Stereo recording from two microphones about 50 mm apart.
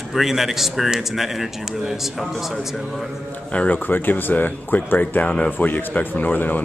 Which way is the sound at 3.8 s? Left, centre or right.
Left.